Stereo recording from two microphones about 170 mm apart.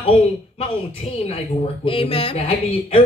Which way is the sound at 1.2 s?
35° left (ahead or behind).